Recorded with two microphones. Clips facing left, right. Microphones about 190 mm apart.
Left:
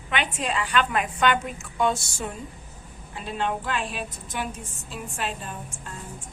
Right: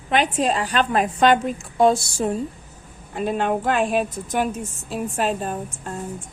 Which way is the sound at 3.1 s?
55° right (ahead or behind).